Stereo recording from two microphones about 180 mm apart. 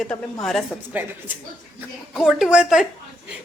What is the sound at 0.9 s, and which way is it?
A woman's voice, 10° right (ahead or behind).